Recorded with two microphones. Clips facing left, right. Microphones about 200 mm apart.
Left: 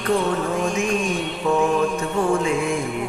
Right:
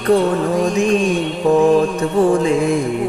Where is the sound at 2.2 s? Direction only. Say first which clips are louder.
Right 8 dB; 35° right (ahead or behind).